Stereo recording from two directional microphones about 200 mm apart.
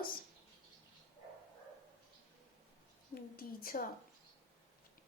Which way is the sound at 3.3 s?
45° left (ahead or behind).